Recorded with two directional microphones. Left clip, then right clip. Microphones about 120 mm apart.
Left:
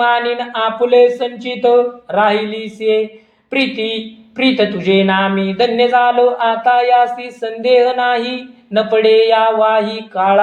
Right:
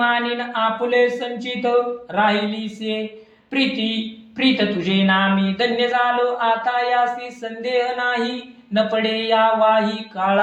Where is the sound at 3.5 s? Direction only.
30° left (ahead or behind).